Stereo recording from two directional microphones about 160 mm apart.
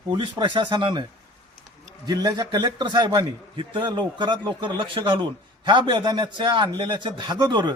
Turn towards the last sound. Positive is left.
turn(degrees=-30)  # may be behind; listen again after turning